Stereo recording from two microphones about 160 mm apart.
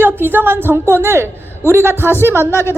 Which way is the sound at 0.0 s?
15° right (ahead or behind).